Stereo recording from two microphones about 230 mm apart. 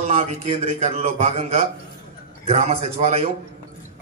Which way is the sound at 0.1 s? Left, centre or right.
Right.